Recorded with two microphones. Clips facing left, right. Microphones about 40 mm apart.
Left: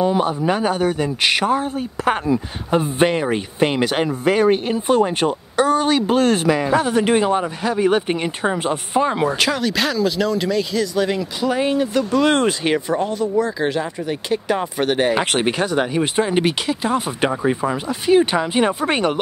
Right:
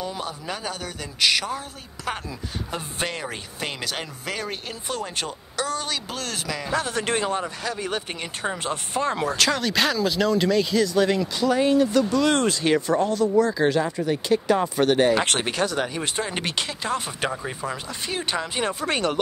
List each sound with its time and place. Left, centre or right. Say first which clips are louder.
0.0 s a man's voice: left 13 dB; left
6.7 s speech: left 4 dB; centre
9.5 s speech: left 3 dB; centre
11.5 s a man's voice: even; left